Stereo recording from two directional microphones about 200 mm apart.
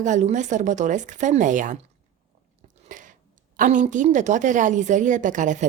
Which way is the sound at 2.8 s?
40° right (ahead or behind).